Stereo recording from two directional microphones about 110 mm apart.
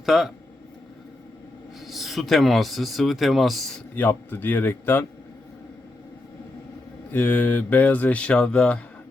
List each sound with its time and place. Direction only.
0.0 s speech: centre (ahead or behind)
1.9 s speech: centre (ahead or behind)
3.9 s a man's voice: 20° left (ahead or behind)
7.1 s speech: 15° left (ahead or behind)